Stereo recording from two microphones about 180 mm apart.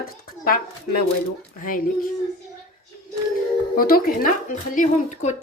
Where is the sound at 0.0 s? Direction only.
50° left (ahead or behind).